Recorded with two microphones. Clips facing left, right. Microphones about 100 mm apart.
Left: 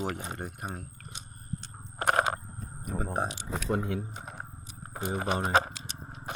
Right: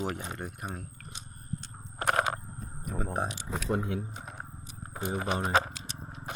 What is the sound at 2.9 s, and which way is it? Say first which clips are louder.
Speech: left 1 dB; 35° left (ahead or behind).